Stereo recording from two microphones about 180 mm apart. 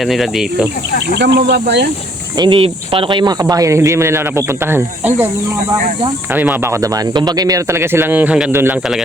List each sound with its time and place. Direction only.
0.0 s cricket: centre (ahead or behind)
1.1 s speech: 70° right (ahead or behind)
2.4 s speech: 30° right (ahead or behind); by 9.0 s 5° right (ahead or behind)